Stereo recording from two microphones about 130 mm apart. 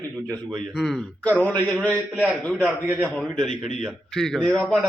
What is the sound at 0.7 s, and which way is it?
Speech, centre (ahead or behind).